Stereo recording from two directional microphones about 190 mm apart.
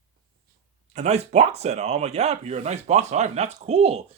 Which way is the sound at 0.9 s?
35° right (ahead or behind).